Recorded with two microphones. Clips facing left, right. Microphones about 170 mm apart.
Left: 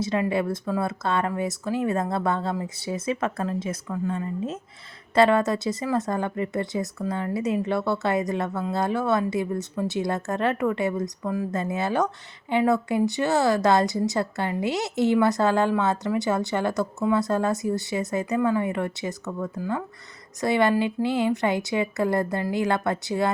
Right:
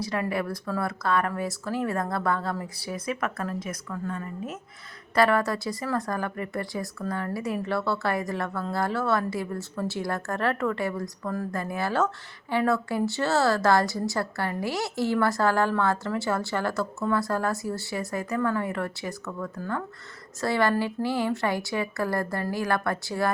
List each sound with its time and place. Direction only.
0.0 s speech: 20° left (ahead or behind)